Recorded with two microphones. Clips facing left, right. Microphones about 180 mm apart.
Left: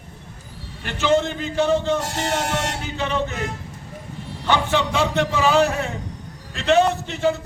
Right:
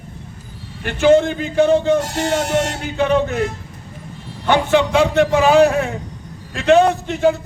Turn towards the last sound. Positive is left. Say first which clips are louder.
# right 5 dB
turn(degrees=-55)  # may be behind; listen again after turning